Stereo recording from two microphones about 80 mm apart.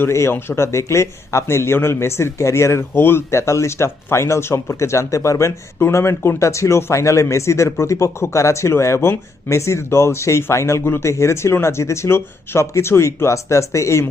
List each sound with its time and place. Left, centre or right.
0.0 s speech: left